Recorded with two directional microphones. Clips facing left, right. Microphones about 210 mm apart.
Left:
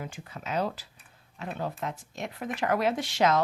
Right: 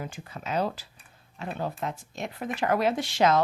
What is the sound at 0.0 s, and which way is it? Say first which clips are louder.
Speech: right 2 dB; 35° right (ahead or behind).